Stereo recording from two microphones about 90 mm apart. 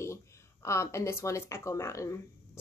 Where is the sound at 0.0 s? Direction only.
30° left (ahead or behind).